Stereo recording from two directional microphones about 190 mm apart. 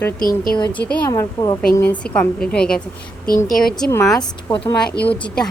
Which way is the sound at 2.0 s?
5° left (ahead or behind).